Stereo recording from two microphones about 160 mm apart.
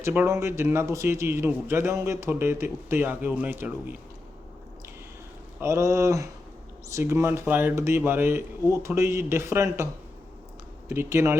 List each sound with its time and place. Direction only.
0.0 s a man's voice: 15° right (ahead or behind)
5.5 s a man's voice: 15° right (ahead or behind)